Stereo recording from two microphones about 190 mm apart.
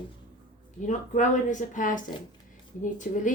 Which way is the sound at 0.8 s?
40° left (ahead or behind).